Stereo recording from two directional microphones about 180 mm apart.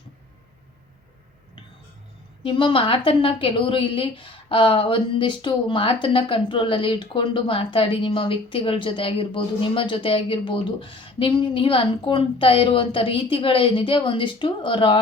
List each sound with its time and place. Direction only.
2.4 s a woman's voice: 25° left (ahead or behind)